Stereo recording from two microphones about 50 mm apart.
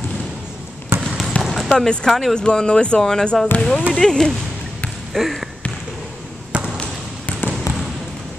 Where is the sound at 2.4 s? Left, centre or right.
Centre.